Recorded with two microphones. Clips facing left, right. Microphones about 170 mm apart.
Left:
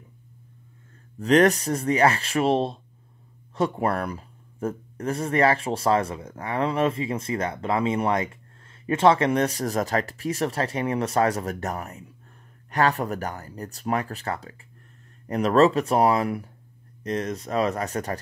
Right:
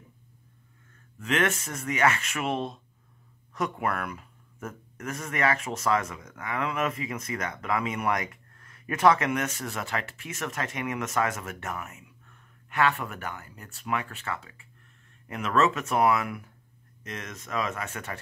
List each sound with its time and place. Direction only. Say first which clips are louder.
1.1 s speech: left 9 dB; 35° left (ahead or behind)